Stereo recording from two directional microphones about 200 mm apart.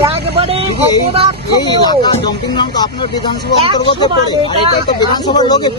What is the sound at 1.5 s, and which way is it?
Speech, 20° left (ahead or behind).